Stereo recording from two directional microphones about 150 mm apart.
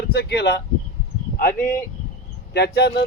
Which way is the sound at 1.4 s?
75° left (ahead or behind).